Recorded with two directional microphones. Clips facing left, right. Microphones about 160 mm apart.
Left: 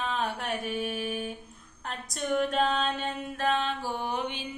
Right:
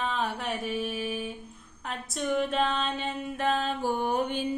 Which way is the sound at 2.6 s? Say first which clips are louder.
Left 1 dB; 40° left (ahead or behind).